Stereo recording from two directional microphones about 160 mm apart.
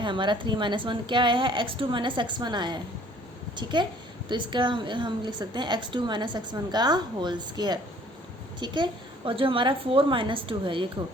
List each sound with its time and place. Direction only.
0.0 s a woman's voice: 30° right (ahead or behind)